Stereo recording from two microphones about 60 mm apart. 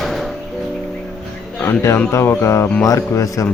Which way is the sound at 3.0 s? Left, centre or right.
Left.